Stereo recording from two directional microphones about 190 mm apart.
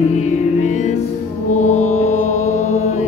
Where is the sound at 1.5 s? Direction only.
40° left (ahead or behind).